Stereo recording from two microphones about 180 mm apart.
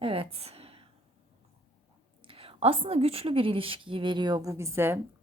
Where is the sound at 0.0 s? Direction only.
30° right (ahead or behind).